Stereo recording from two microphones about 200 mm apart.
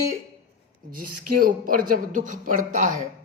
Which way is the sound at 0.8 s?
45° right (ahead or behind).